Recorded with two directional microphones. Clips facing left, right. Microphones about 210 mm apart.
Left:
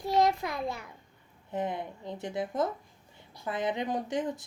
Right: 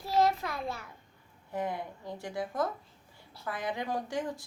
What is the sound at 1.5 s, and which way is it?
A woman's voice, 20° left (ahead or behind).